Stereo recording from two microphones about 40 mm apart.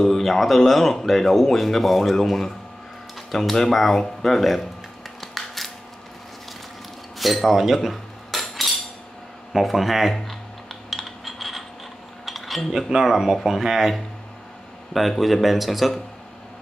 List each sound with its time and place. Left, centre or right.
0.0 s speech: centre
5.2 s a sound: centre
7.2 s cutlery: centre
9.5 s speech: centre
10.9 s a sound: centre
12.3 s cutlery: centre
12.7 s speech: centre